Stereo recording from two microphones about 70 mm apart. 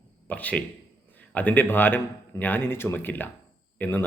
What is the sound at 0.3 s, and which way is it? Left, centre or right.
A man's voice, left.